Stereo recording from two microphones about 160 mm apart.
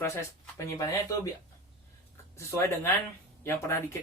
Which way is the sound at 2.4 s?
20° left (ahead or behind).